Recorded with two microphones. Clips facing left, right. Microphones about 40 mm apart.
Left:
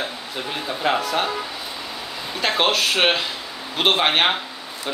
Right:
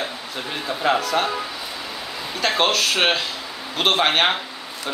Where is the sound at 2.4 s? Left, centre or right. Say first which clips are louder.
Even; centre.